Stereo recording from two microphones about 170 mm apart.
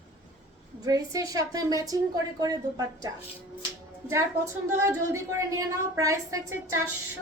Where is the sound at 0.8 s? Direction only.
20° right (ahead or behind).